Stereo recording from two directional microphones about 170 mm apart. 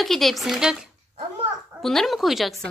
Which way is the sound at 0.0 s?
Centre (ahead or behind).